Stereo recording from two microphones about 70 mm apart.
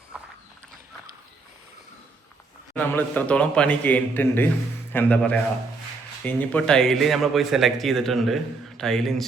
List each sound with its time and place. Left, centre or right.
2.9 s a man's voice: left
6.7 s a man's voice: centre